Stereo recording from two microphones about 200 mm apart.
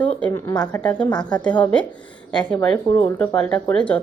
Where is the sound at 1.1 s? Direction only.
20° left (ahead or behind).